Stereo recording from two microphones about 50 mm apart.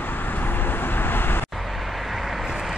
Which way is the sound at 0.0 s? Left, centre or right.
Left.